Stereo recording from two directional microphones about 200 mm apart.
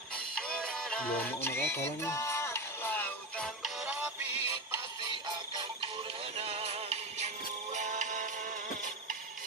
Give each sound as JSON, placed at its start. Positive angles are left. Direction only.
{"t": 0.4, "sound": "music", "side_deg": 5}
{"t": 6.4, "sound": "synthetic singing", "side_deg": -30}
{"t": 7.7, "sound": "music", "side_deg": -40}